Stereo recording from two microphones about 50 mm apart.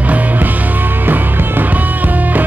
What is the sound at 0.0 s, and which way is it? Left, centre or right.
Music, right.